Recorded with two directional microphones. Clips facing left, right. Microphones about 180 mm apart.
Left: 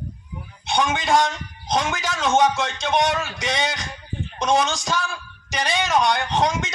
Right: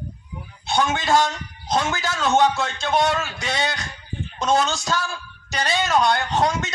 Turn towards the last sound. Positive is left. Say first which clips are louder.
# even
turn(degrees=0)  # may be behind; listen again after turning